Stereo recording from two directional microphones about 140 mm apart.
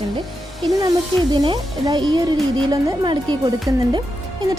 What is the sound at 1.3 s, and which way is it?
Speech, 35° right (ahead or behind).